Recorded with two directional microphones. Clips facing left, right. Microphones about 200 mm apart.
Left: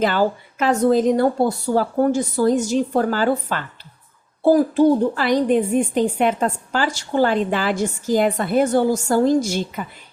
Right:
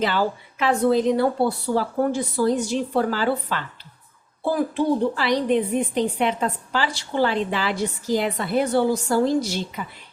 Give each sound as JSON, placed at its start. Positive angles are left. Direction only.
{"t": 0.0, "sound": "a woman's voice", "side_deg": 45}